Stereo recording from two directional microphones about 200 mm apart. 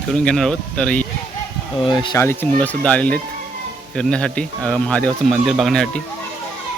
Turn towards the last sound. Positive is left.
turn(degrees=0)  # may be behind; listen again after turning